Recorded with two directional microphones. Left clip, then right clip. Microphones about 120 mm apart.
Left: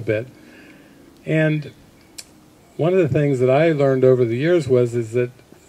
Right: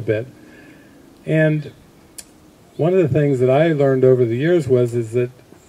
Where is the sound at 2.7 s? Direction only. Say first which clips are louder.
Right 1 dB; 15° left (ahead or behind).